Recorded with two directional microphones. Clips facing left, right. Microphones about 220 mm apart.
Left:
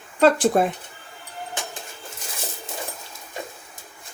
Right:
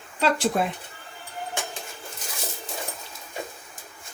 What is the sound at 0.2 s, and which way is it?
Speech, 45° left (ahead or behind).